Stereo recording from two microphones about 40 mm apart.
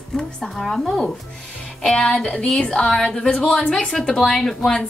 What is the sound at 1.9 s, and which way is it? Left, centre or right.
Speech, left.